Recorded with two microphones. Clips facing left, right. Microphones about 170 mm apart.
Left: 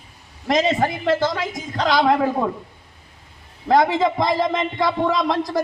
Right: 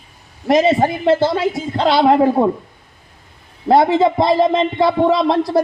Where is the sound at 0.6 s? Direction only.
25° right (ahead or behind).